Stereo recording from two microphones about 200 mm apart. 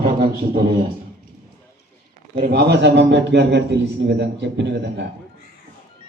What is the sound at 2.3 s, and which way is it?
A man's voice, 50° right (ahead or behind).